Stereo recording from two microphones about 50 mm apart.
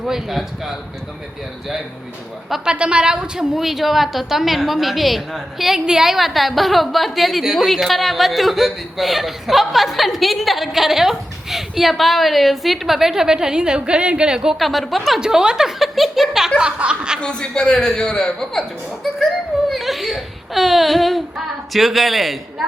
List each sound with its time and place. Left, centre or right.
0.1 s speech: centre
2.6 s speech: right
14.6 s speech: centre
15.2 s speech: centre
16.6 s chuckle: right
17.2 s speech: centre
19.7 s speech: centre